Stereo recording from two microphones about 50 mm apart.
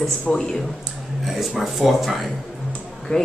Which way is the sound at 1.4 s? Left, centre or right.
Centre.